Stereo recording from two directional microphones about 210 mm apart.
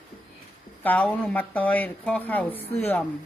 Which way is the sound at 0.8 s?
5° left (ahead or behind).